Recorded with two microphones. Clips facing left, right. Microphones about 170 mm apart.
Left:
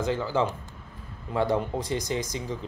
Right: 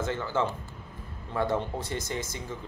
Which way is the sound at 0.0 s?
15° left (ahead or behind).